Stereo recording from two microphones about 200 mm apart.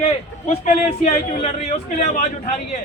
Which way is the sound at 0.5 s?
30° left (ahead or behind).